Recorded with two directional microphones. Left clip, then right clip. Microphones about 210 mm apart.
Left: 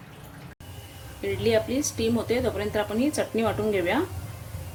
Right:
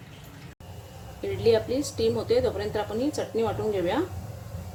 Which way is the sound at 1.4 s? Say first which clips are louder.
Right 1 dB; 25° left (ahead or behind).